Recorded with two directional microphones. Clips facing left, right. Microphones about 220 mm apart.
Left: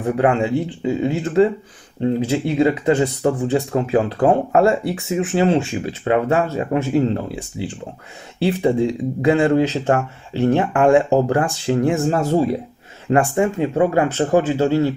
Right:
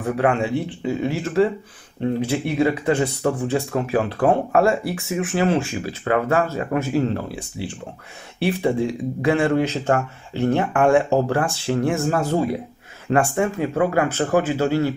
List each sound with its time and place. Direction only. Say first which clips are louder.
0.0 s speech: left 3 dB; 25° left (ahead or behind)